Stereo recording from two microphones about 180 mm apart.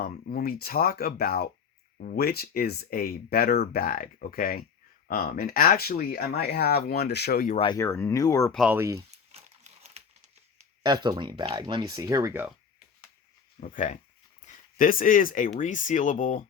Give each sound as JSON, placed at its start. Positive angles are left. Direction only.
{"t": 0.0, "sound": "speech", "side_deg": 55}
{"t": 7.5, "sound": "speech", "side_deg": 30}
{"t": 7.8, "sound": "speech", "side_deg": 15}
{"t": 8.5, "sound": "speech", "side_deg": -5}
{"t": 9.3, "sound": "crumpling", "side_deg": -35}
{"t": 10.8, "sound": "speech", "side_deg": -25}
{"t": 13.6, "sound": "speech", "side_deg": 45}